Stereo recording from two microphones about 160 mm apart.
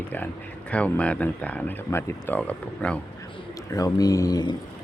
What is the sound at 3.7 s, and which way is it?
Speech, 20° left (ahead or behind).